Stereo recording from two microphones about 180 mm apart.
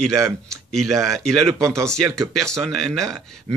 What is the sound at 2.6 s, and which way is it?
Speech, centre (ahead or behind).